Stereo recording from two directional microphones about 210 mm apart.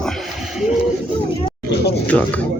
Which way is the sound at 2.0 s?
5° left (ahead or behind).